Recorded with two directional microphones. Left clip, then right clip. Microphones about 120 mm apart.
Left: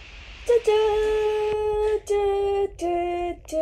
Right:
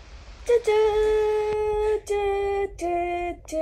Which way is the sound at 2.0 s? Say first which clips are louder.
Left 2 dB; 25° right (ahead or behind).